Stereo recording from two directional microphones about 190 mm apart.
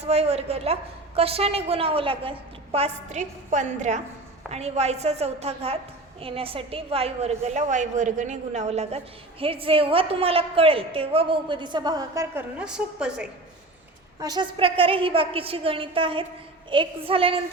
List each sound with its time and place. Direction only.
0.0 s a woman's voice: 35° right (ahead or behind); by 13.3 s 5° right (ahead or behind)
14.2 s a woman's voice: 20° right (ahead or behind)